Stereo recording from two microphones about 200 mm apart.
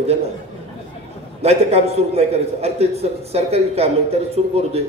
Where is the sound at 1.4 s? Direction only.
30° right (ahead or behind).